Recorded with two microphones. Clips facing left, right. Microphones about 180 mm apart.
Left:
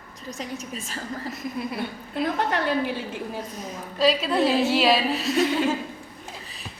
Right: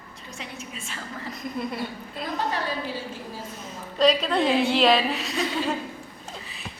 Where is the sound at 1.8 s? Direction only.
55° left (ahead or behind).